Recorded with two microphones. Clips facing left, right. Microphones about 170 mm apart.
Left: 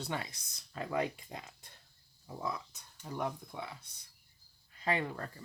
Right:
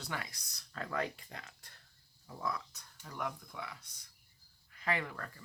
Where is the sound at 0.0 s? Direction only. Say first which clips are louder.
Left 4 dB; 25° left (ahead or behind).